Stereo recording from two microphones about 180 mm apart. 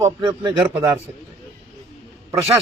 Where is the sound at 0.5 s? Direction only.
5° right (ahead or behind).